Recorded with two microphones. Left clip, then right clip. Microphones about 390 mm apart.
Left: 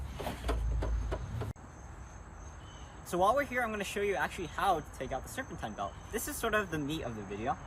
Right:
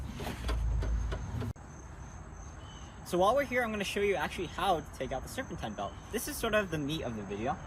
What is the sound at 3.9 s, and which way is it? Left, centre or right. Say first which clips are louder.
Speech: right 3 dB; centre.